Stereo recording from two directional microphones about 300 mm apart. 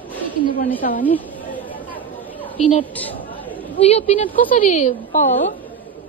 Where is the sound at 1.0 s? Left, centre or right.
Centre.